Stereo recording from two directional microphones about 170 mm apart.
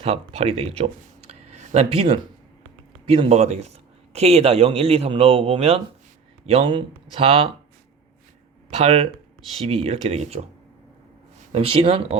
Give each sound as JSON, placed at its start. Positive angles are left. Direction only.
{"t": 0.0, "sound": "speech", "side_deg": -35}
{"t": 1.3, "sound": "a sound", "side_deg": -40}
{"t": 3.1, "sound": "speech", "side_deg": -35}
{"t": 8.8, "sound": "speech", "side_deg": -35}
{"t": 11.5, "sound": "speech", "side_deg": -35}